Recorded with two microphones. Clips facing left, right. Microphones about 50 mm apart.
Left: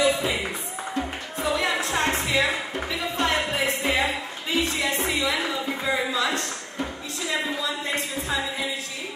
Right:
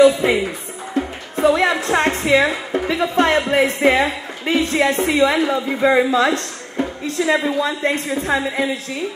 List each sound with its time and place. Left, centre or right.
0.0 s speech: right
0.9 s music: right
2.2 s a woman's voice: right